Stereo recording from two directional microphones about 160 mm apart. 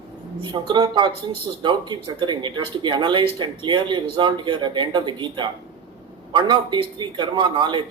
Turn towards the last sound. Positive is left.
turn(degrees=-30)  # may be behind; listen again after turning